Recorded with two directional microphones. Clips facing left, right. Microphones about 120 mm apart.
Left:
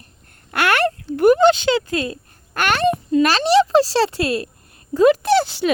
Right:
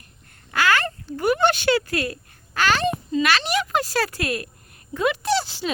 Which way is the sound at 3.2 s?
35° left (ahead or behind).